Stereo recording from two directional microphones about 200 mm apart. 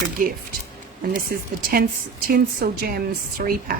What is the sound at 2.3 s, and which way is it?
A woman's voice, 50° right (ahead or behind).